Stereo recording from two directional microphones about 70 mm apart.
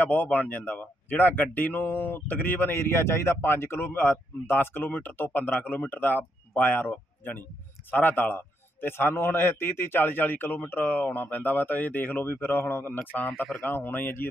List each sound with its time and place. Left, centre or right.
0.0 s speech: left